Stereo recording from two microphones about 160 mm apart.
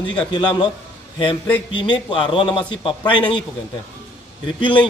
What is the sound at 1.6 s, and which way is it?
A man's voice, 30° left (ahead or behind).